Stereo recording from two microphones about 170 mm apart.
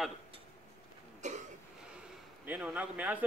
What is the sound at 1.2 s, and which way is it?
Cough, 45° right (ahead or behind).